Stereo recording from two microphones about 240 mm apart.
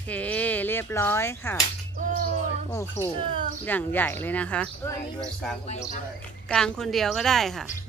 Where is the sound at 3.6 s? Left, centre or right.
Centre.